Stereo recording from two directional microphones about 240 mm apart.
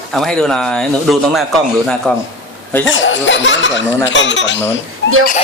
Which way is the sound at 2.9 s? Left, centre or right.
Left.